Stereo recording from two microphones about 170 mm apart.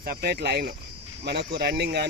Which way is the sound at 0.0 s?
65° right (ahead or behind).